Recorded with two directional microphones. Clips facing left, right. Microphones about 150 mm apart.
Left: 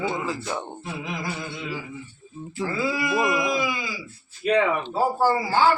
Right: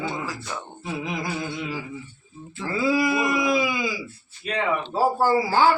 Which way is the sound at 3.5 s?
5° right (ahead or behind).